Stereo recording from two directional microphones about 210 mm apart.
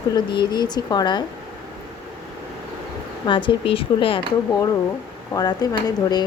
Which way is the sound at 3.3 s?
25° left (ahead or behind).